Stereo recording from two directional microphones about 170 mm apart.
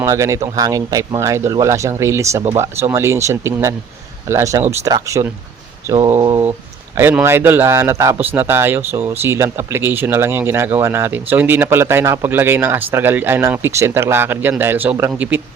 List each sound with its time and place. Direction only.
0.0 s speech: 15° right (ahead or behind)
5.9 s mantra: 20° right (ahead or behind)
6.9 s speech: 15° right (ahead or behind)